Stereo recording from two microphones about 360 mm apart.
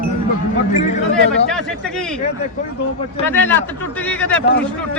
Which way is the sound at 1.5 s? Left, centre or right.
Centre.